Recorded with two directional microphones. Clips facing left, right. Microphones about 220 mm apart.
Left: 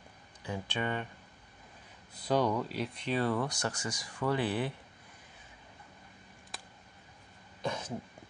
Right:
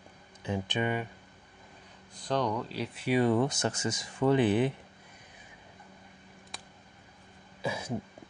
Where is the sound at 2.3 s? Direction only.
5° left (ahead or behind); by 4.7 s 20° right (ahead or behind).